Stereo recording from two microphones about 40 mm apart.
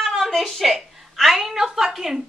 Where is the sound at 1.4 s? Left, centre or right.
Centre.